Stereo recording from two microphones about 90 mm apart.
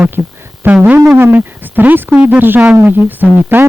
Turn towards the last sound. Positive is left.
turn(degrees=-20)  # may be behind; listen again after turning